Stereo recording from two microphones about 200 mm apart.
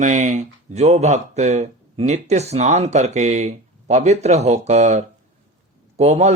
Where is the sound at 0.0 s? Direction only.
35° right (ahead or behind).